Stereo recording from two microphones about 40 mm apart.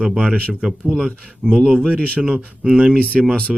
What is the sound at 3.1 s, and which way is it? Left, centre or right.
Speech, centre.